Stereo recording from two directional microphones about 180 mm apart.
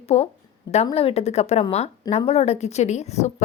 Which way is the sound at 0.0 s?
35° left (ahead or behind).